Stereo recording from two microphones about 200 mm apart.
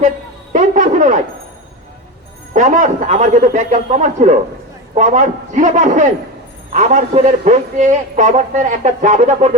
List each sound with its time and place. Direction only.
0.5 s a man's voice: 40° right (ahead or behind)
2.5 s a man's voice: 40° right (ahead or behind)